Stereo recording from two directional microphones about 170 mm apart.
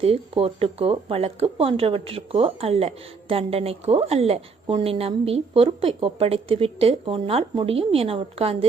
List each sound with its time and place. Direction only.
0.0 s speech: 35° right (ahead or behind)